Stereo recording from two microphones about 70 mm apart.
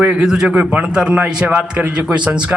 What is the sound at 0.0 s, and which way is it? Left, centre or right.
A man's voice, centre.